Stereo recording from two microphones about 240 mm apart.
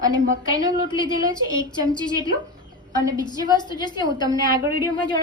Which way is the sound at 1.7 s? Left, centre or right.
Centre.